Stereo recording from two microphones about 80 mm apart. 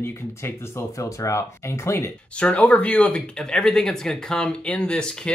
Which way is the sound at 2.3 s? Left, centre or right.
Centre.